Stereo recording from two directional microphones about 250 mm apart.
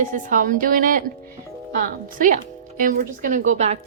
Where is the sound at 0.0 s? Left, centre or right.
Right.